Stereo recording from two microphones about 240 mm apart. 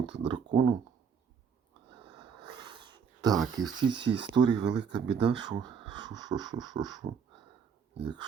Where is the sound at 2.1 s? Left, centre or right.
Centre.